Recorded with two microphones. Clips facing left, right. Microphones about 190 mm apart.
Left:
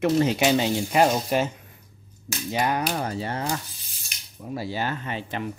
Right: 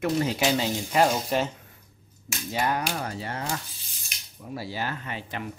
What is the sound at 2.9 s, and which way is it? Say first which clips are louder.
Speech: left 4 dB; 30° left (ahead or behind).